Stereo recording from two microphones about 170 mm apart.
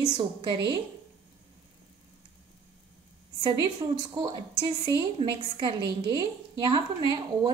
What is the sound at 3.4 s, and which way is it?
A woman's voice, 25° right (ahead or behind).